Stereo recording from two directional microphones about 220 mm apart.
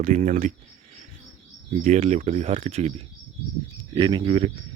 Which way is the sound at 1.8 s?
30° right (ahead or behind).